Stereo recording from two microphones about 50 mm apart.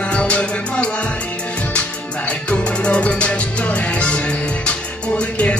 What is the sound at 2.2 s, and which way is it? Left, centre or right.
Music, left.